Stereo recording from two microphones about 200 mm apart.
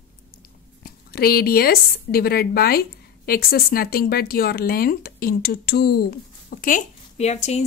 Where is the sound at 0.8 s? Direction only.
50° left (ahead or behind).